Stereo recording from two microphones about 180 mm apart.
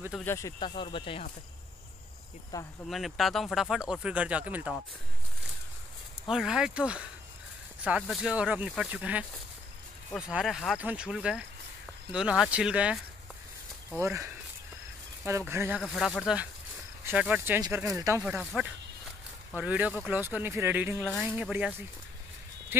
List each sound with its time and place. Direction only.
0.2 s speech: 15° left (ahead or behind)
2.5 s speech: 20° left (ahead or behind)
2.9 s speech: centre (ahead or behind)
6.3 s speech: 5° right (ahead or behind)
14.0 s speech: 15° right (ahead or behind)
15.8 s speech: 5° left (ahead or behind); by 18.2 s 15° right (ahead or behind)
18.2 s speech: 5° right (ahead or behind)